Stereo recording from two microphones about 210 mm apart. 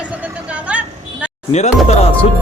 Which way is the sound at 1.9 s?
30° left (ahead or behind).